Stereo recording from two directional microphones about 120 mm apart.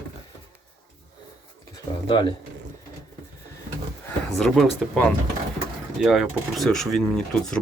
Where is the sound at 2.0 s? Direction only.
40° left (ahead or behind).